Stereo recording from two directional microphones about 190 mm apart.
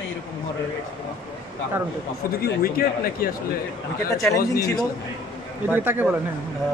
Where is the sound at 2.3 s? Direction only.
50° left (ahead or behind).